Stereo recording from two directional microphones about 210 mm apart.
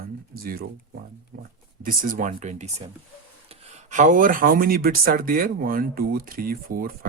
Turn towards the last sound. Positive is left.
turn(degrees=-45)  # may be behind; listen again after turning